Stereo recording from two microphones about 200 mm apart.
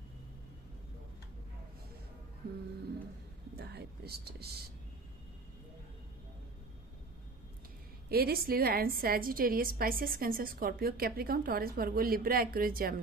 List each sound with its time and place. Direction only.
3.5 s a woman's voice: 55° right (ahead or behind)
8.1 s a woman's voice: 50° right (ahead or behind)